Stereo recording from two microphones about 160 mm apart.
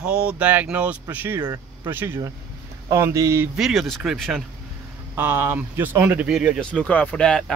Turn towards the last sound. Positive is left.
turn(degrees=5)  # may be behind; listen again after turning